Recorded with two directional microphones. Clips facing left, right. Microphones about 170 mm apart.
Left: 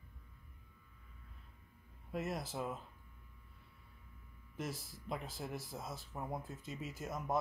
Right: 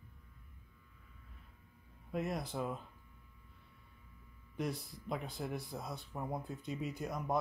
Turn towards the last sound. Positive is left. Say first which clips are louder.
# right 3 dB
turn(degrees=0)  # may be behind; listen again after turning